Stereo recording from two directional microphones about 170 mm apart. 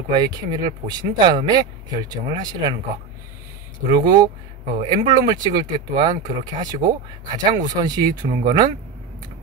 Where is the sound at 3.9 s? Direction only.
25° right (ahead or behind).